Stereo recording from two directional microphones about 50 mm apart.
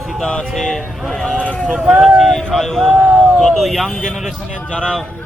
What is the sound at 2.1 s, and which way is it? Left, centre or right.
Speech, centre.